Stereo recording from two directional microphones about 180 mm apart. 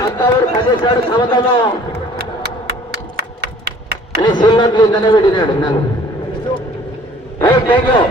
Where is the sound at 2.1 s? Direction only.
60° right (ahead or behind).